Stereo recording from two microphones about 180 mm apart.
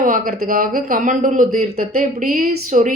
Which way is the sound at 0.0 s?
55° right (ahead or behind).